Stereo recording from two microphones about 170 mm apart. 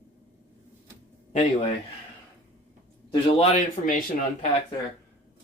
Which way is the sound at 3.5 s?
50° left (ahead or behind).